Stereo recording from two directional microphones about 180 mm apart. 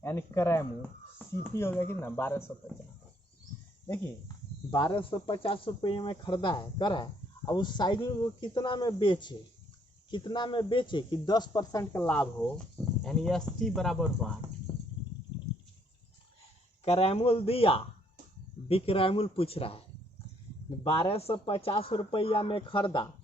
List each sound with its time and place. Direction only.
0.0 s speech: 15° left (ahead or behind)
4.7 s speech: 25° left (ahead or behind); by 14.3 s 5° left (ahead or behind)
14.7 s a sound: 20° right (ahead or behind)
16.8 s speech: 35° left (ahead or behind)
20.8 s speech: 30° left (ahead or behind)